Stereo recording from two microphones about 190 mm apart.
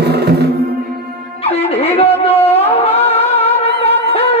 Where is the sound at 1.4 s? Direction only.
30° left (ahead or behind).